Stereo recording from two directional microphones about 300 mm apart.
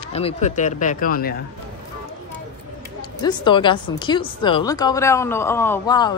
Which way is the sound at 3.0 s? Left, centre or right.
Centre.